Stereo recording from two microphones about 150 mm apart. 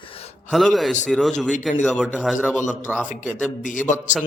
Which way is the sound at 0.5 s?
Centre (ahead or behind).